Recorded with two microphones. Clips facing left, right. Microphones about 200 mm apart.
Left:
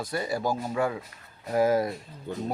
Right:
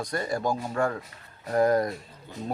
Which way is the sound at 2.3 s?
50° left (ahead or behind).